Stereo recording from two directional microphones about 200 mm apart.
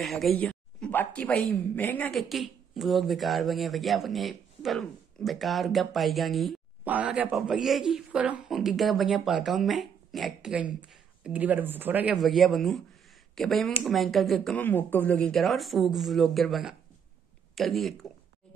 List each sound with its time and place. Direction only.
0.0 s a man's voice: centre (ahead or behind)